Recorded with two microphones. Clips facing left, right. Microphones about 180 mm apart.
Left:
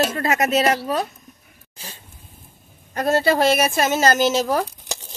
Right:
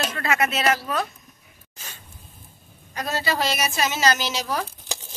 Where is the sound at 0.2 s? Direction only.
40° left (ahead or behind).